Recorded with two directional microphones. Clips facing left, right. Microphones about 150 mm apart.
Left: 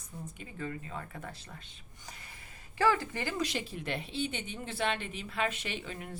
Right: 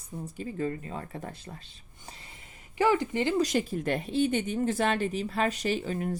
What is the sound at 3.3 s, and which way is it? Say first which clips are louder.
Speech: right 8 dB; 40° right (ahead or behind).